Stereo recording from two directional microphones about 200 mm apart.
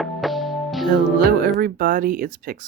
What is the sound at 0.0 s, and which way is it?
Music, centre (ahead or behind).